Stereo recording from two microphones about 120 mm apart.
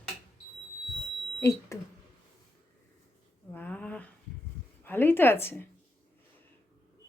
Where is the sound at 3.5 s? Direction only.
15° left (ahead or behind).